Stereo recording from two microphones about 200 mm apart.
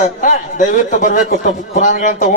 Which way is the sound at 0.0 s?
40° left (ahead or behind).